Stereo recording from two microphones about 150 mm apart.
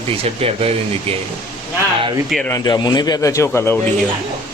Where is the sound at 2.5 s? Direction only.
25° left (ahead or behind).